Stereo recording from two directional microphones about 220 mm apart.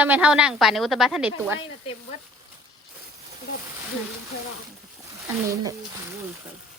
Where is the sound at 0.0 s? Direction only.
5° right (ahead or behind).